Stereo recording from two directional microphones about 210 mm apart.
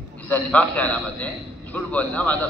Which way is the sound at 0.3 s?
5° left (ahead or behind).